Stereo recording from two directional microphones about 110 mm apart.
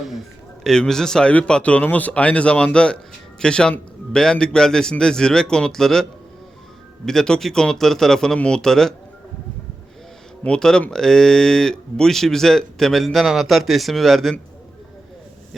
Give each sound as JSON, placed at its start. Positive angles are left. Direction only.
{"t": 0.6, "sound": "a man's voice", "side_deg": 5}
{"t": 10.4, "sound": "speech", "side_deg": 5}